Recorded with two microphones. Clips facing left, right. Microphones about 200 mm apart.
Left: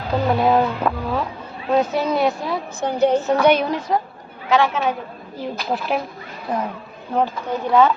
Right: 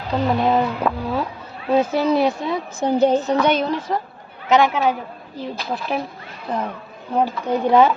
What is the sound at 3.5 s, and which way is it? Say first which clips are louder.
Speech: left 2 dB; 10° left (ahead or behind).